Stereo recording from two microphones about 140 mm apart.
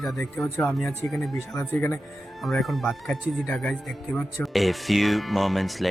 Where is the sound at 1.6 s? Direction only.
15° left (ahead or behind).